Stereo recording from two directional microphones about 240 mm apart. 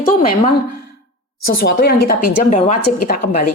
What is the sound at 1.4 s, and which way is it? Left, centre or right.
A woman's voice, left.